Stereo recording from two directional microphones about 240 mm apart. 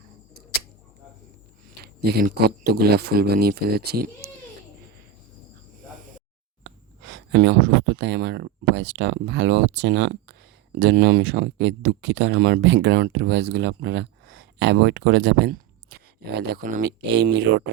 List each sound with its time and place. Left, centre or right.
1.8 s speech: right
7.0 s speech: right
17.1 s speech: right